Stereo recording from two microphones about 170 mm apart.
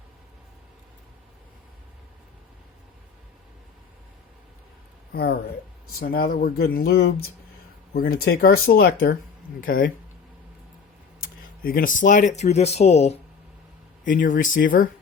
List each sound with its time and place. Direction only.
5.1 s speech: 65° left (ahead or behind)
11.2 s speech: 60° left (ahead or behind); by 13.1 s 40° left (ahead or behind)
14.0 s speech: 50° left (ahead or behind)